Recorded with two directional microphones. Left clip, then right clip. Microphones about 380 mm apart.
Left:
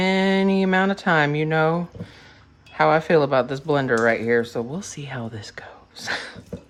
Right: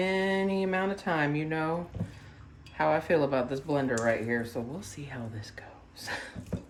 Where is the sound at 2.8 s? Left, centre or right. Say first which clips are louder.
Left 9 dB; centre.